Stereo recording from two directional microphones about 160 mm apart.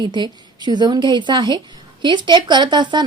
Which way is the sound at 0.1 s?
30° right (ahead or behind).